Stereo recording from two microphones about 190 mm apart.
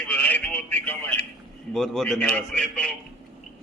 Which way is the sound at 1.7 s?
Centre (ahead or behind).